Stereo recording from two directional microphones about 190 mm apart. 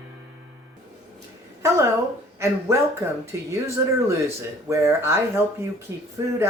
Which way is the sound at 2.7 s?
15° right (ahead or behind).